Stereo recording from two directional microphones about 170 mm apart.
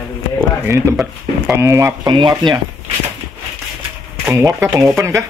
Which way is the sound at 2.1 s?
25° right (ahead or behind).